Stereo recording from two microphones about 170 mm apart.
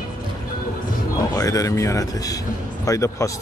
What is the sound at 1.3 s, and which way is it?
Speech, 20° left (ahead or behind).